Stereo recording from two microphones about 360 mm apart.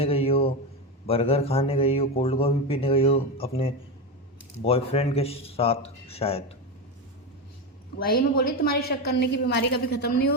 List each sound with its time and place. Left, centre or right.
0.0 s a sound: centre
1.0 s a man's voice: centre
7.9 s a woman's voice: left